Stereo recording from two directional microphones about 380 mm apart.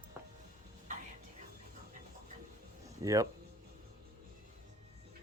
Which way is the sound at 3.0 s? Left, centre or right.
Centre.